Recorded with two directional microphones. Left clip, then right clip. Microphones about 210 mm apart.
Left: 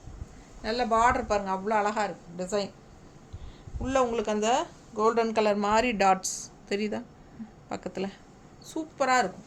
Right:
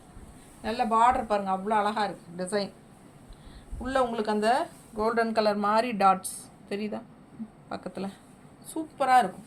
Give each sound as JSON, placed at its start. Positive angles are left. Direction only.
{"t": 0.6, "sound": "a woman's voice", "side_deg": 20}
{"t": 3.8, "sound": "a woman's voice", "side_deg": 15}
{"t": 8.7, "sound": "a woman's voice", "side_deg": 25}